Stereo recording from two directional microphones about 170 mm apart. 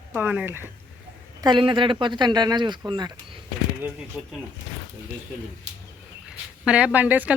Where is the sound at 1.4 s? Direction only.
25° right (ahead or behind).